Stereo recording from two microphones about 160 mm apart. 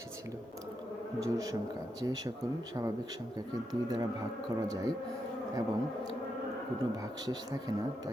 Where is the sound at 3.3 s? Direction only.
25° right (ahead or behind).